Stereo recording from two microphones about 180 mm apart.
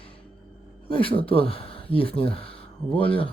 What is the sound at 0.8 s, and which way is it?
Speech, 30° left (ahead or behind).